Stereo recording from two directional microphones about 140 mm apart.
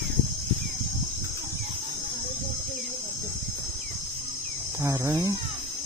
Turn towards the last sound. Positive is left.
turn(degrees=-25)  # may be behind; listen again after turning